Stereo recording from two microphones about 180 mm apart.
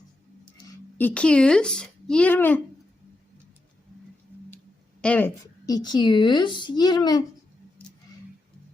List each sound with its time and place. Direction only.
0.9 s speech: 10° left (ahead or behind)
4.5 s a sound: 5° left (ahead or behind)
5.6 s speech: 20° left (ahead or behind)